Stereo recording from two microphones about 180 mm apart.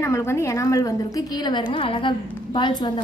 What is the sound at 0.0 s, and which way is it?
A woman's voice, 15° left (ahead or behind).